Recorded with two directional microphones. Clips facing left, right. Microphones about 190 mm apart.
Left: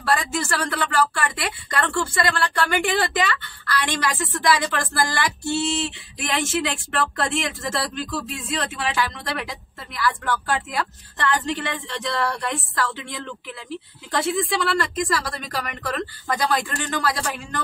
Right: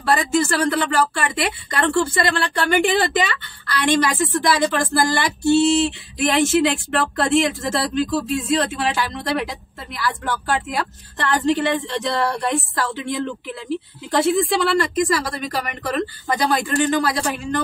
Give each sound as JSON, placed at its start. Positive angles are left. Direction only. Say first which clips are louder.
{"t": 0.0, "sound": "a woman's voice", "louder": "right 5 dB", "side_deg": -20}
{"t": 4.5, "sound": "female singing", "louder": "right 1 dB", "side_deg": -25}
{"t": 14.1, "sound": "a woman's voice", "louder": "right 5 dB", "side_deg": -30}
{"t": 14.8, "sound": "speech", "louder": "right 5 dB", "side_deg": -15}